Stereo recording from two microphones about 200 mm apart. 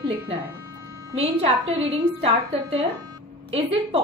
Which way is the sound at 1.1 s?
30° right (ahead or behind).